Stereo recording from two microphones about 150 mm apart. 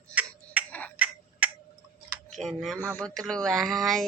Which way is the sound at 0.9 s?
10° right (ahead or behind).